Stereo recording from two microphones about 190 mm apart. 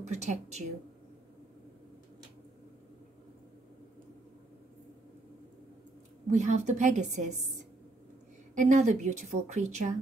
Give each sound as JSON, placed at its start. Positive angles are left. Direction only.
{"t": 0.0, "sound": "a woman's voice", "side_deg": -35}
{"t": 6.3, "sound": "a woman's voice", "side_deg": -35}
{"t": 8.5, "sound": "a woman's voice", "side_deg": -40}